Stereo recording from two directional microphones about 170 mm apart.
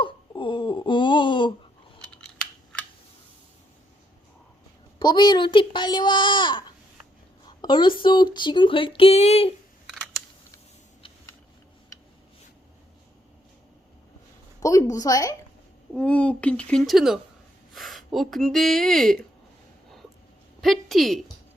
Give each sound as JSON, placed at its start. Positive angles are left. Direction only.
{"t": 0.0, "sound": "a sound", "side_deg": 30}
{"t": 2.0, "sound": "scissors", "side_deg": 5}
{"t": 4.9, "sound": "speech", "side_deg": 25}
{"t": 14.6, "sound": "speech", "side_deg": 20}
{"t": 16.0, "sound": "speech", "side_deg": 5}
{"t": 20.6, "sound": "a woman's voice", "side_deg": 0}